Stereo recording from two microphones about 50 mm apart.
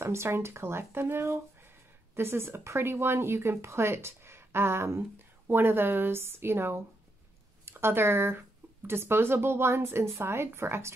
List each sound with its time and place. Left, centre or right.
0.0 s a woman's voice: right
5.5 s a woman's voice: right